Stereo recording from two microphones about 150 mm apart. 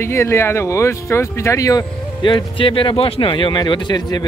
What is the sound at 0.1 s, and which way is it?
Speech, 20° left (ahead or behind).